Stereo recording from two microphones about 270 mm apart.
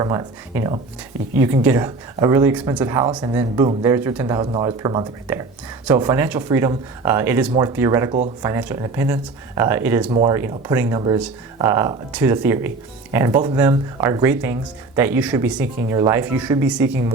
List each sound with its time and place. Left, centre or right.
0.0 s speech: centre
10.1 s speech: right
10.3 s speech: centre